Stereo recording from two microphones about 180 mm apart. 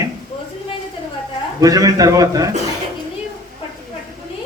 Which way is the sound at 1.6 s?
20° right (ahead or behind).